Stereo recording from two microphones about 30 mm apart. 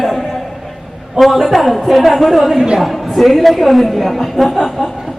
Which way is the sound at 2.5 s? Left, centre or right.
Centre.